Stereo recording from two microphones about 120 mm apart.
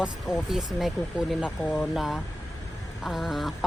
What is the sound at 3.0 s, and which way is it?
Speech, centre (ahead or behind).